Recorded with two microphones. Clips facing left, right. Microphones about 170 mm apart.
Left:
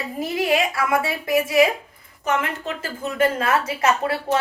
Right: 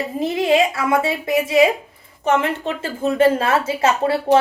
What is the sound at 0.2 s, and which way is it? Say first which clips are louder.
A woman's voice: right 4 dB; 25° right (ahead or behind).